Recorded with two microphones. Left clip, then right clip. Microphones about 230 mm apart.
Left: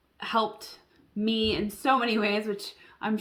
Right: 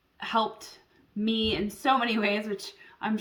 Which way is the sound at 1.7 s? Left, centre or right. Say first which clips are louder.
Even; centre.